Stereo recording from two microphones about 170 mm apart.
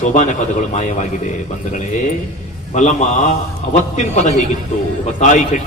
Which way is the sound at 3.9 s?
40° left (ahead or behind).